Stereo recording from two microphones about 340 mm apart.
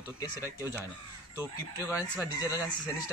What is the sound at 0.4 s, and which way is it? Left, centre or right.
Speech, centre.